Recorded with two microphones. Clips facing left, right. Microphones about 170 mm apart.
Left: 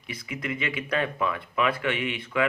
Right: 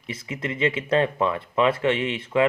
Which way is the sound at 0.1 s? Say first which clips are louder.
Right 2 dB; 25° right (ahead or behind).